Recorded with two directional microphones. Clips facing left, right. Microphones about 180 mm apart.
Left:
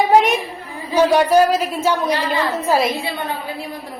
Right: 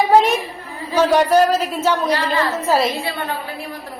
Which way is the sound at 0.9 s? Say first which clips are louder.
Left 1 dB; 10° left (ahead or behind).